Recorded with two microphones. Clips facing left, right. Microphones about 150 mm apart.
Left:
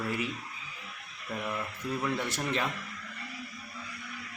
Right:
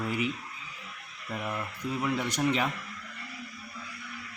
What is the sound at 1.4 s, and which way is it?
Speech, 10° right (ahead or behind).